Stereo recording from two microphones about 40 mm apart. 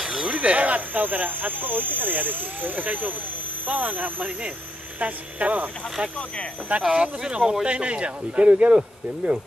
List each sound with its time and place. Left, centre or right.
0.2 s speech: right
6.8 s a man's voice: centre